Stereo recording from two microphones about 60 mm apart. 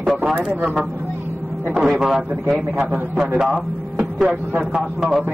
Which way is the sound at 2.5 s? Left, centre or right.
Right.